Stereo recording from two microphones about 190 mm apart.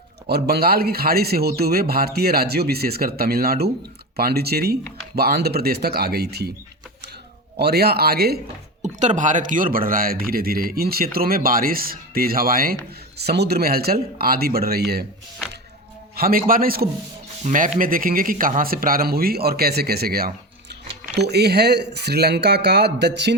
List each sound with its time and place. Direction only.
0.3 s speech: 60° right (ahead or behind)
7.5 s speech: 55° right (ahead or behind)
8.8 s a man's voice: 40° right (ahead or behind); by 15.0 s 55° right (ahead or behind)
16.1 s a man's voice: 50° right (ahead or behind)
17.4 s a man's voice: 40° right (ahead or behind); by 23.3 s 60° right (ahead or behind)